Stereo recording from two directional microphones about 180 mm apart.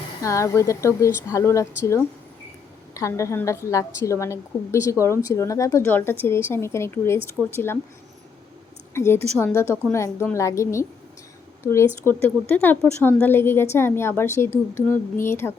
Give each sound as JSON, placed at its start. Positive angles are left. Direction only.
{"t": 0.2, "sound": "a woman's voice", "side_deg": 15}
{"t": 8.9, "sound": "a woman's voice", "side_deg": 15}